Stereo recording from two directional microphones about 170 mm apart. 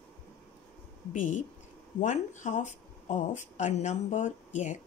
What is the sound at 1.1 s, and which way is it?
Speech, 50° left (ahead or behind).